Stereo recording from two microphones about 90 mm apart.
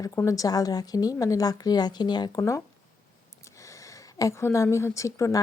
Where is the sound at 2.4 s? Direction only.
35° left (ahead or behind).